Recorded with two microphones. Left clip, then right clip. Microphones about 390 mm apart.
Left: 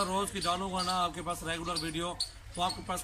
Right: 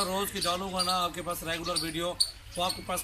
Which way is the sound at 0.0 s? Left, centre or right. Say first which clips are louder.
Right 1 dB; centre.